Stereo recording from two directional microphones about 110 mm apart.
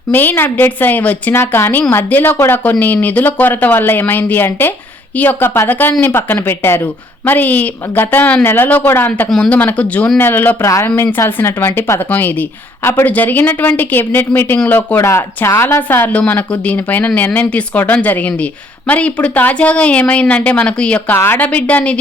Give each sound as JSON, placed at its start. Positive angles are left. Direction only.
{"t": 0.1, "sound": "a woman's voice", "side_deg": 20}